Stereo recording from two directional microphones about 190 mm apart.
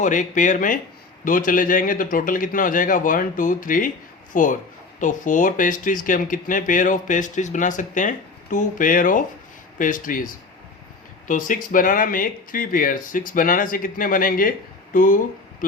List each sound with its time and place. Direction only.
0.0 s speech: 40° left (ahead or behind)
11.3 s speech: 45° left (ahead or behind)